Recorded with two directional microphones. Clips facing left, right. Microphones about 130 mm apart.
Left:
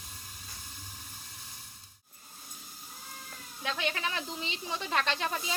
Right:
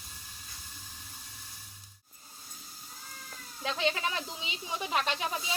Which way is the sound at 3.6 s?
20° right (ahead or behind).